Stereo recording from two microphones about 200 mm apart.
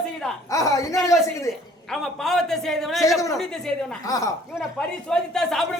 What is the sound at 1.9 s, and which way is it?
A man's voice, centre (ahead or behind).